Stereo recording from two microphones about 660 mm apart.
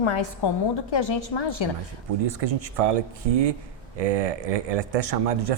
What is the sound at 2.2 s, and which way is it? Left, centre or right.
A man's voice, right.